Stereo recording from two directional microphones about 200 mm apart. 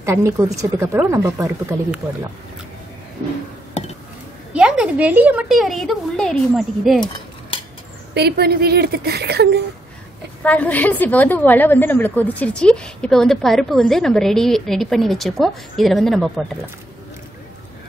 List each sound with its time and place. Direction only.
0.0 s a woman's voice: 15° right (ahead or behind)
4.6 s a woman's voice: 5° right (ahead or behind)
8.1 s speech: 55° right (ahead or behind)
10.4 s a woman's voice: 5° left (ahead or behind)